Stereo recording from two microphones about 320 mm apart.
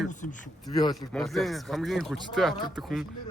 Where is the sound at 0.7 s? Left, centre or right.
Centre.